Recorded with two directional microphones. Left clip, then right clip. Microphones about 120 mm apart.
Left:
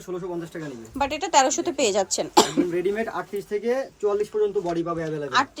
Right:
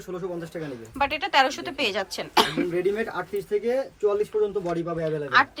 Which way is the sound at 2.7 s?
Centre (ahead or behind).